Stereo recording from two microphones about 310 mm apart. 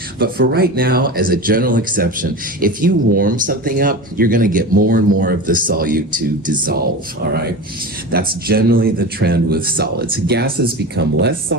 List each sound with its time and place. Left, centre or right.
0.2 s speech: right
8.1 s speech: right